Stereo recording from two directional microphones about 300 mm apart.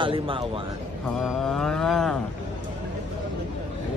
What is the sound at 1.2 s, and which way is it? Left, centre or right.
Mantra, centre.